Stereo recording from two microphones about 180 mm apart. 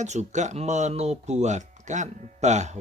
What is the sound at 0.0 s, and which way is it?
Speech, 40° right (ahead or behind).